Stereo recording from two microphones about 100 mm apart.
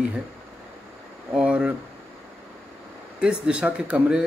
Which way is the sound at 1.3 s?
10° right (ahead or behind).